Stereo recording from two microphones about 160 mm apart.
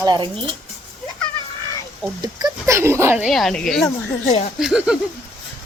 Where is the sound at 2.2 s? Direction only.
25° right (ahead or behind).